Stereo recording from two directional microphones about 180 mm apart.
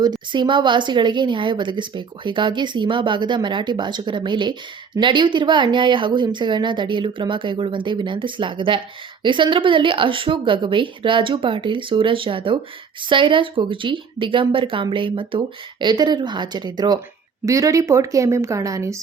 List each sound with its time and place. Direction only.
0.0 s a woman's voice: 25° right (ahead or behind)